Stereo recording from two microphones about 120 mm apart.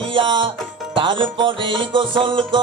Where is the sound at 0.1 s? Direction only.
45° right (ahead or behind).